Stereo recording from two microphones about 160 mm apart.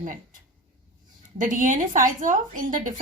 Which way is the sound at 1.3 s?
55° right (ahead or behind).